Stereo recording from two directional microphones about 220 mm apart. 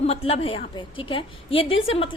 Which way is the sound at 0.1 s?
25° left (ahead or behind).